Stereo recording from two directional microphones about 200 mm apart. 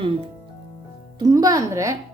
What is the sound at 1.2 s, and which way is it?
Speech, 20° right (ahead or behind).